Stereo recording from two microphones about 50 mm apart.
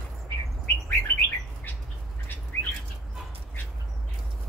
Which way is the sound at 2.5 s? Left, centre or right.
Left.